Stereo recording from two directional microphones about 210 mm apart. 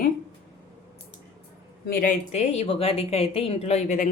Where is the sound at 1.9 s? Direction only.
40° left (ahead or behind).